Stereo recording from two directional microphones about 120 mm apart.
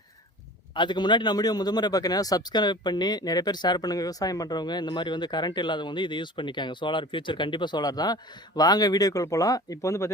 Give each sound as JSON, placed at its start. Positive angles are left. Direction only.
{"t": 0.7, "sound": "a man's voice", "side_deg": 40}